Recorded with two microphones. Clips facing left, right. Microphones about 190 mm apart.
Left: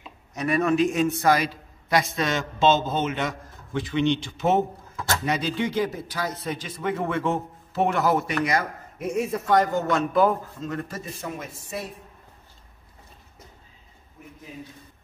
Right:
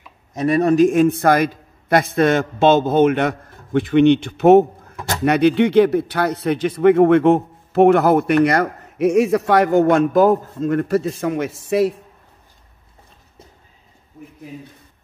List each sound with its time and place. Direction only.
0.4 s a man's voice: 35° right (ahead or behind); by 4.6 s 60° right (ahead or behind)
4.9 s a sound: 15° right (ahead or behind)
5.2 s a man's voice: 65° right (ahead or behind)
8.5 s speech: 70° right (ahead or behind)